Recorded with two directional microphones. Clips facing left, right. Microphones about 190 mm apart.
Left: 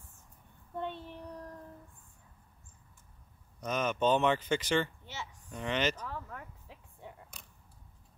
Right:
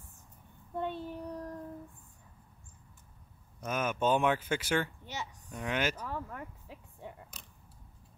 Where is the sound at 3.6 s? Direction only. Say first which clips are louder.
Left 1 dB; 10° right (ahead or behind).